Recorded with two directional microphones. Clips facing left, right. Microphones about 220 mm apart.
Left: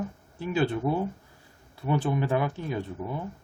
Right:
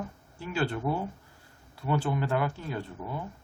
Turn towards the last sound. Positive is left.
turn(degrees=20)  # may be behind; listen again after turning